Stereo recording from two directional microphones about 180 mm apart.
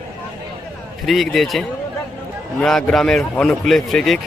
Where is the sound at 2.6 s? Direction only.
Centre (ahead or behind).